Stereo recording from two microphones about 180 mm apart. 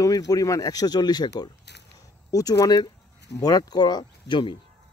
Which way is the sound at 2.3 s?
20° left (ahead or behind).